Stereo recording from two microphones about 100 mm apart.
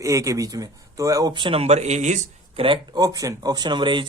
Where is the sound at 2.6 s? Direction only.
60° right (ahead or behind).